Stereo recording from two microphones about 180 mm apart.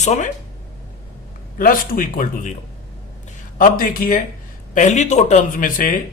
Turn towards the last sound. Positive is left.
turn(degrees=50)  # may be behind; listen again after turning